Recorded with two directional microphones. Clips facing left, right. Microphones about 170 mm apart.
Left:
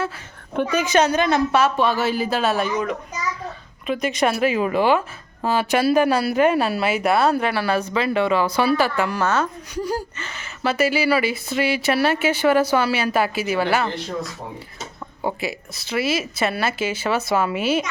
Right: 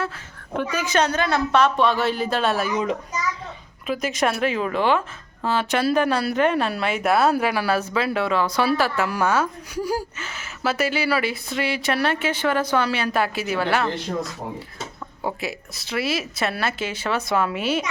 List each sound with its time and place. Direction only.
0.7 s a woman's voice: 20° left (ahead or behind)
1.5 s speech: 5° left (ahead or behind)
3.8 s speech: centre (ahead or behind)
15.2 s speech: centre (ahead or behind)